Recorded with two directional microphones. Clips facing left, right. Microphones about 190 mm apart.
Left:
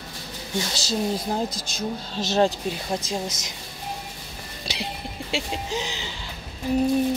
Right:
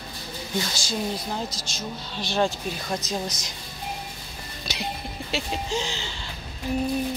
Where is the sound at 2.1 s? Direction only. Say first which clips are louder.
Left 3 dB; 40° left (ahead or behind).